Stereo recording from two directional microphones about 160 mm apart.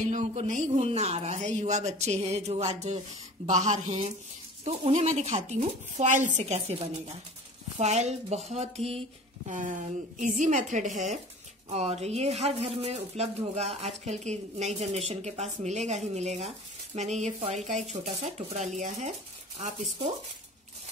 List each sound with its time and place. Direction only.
0.0 s speech: 50° right (ahead or behind)
9.5 s speech: 50° right (ahead or behind)